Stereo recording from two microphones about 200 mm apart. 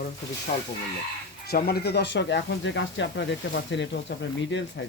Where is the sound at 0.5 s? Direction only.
35° left (ahead or behind).